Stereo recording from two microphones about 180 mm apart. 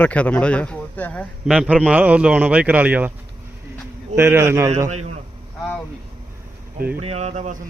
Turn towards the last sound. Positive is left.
turn(degrees=-40)  # may be behind; listen again after turning